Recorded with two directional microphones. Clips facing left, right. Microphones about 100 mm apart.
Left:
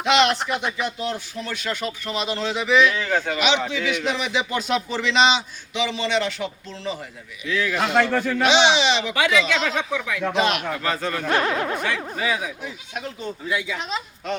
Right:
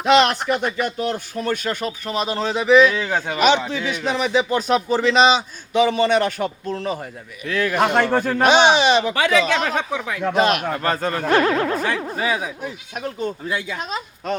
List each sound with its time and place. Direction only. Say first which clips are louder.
0.0 s speech: right 3 dB; 40° right (ahead or behind)
0.3 s speech: right 4 dB; centre (ahead or behind)
0.8 s speech: right 4 dB; 50° right (ahead or behind)
2.9 s speech: right 1 dB; 20° right (ahead or behind)
3.3 s speech: right 4 dB; 45° right (ahead or behind)